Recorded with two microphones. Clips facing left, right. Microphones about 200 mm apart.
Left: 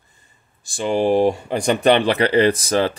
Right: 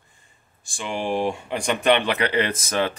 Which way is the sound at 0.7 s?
35° left (ahead or behind).